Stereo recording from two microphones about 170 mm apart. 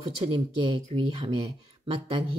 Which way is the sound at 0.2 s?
30° right (ahead or behind).